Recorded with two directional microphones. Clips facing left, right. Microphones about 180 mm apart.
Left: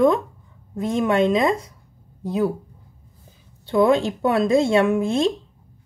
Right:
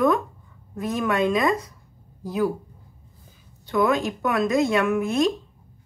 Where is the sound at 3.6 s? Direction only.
30° left (ahead or behind).